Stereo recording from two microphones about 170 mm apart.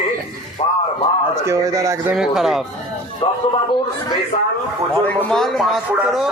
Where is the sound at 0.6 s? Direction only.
35° left (ahead or behind).